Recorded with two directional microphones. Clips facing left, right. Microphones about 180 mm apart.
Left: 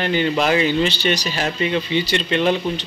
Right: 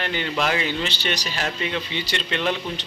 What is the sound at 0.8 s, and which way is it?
Speech, 10° left (ahead or behind).